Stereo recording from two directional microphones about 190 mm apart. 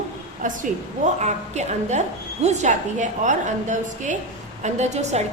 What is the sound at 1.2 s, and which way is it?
A woman's voice, 35° right (ahead or behind).